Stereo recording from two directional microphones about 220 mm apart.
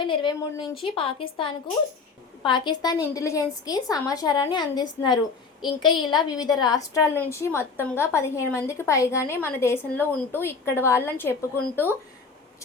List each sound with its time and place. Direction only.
0.0 s a woman's voice: 20° left (ahead or behind)